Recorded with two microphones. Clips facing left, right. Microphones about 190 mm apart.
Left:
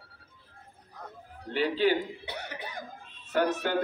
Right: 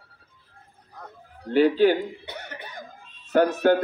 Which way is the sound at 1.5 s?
50° right (ahead or behind).